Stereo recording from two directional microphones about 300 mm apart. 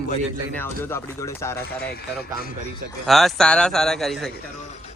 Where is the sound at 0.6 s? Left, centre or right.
Centre.